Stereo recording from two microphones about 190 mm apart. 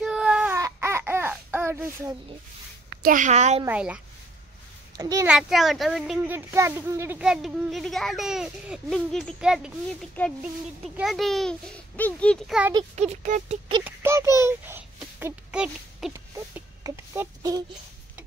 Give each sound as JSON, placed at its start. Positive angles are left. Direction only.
{"t": 0.0, "sound": "baby cry", "side_deg": -5}
{"t": 0.6, "sound": "a sound", "side_deg": -15}
{"t": 2.9, "sound": "a woman's voice", "side_deg": -50}
{"t": 3.6, "sound": "a woman's voice", "side_deg": -5}
{"t": 4.9, "sound": "a child's voice", "side_deg": -20}
{"t": 5.2, "sound": "speech", "side_deg": 0}
{"t": 11.0, "sound": "speech", "side_deg": 0}
{"t": 12.9, "sound": "speech", "side_deg": -35}
{"t": 13.8, "sound": "a child's voice", "side_deg": -15}